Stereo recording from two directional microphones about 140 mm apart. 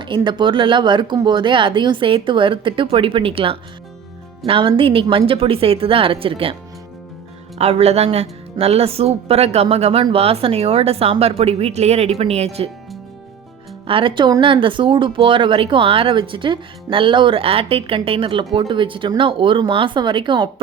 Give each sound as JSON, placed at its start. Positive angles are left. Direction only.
{"t": 0.0, "sound": "speech", "side_deg": -35}
{"t": 7.6, "sound": "speech", "side_deg": -50}
{"t": 13.8, "sound": "speech", "side_deg": -40}